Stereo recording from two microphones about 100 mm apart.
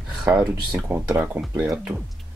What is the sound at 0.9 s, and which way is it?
Speech, 15° right (ahead or behind).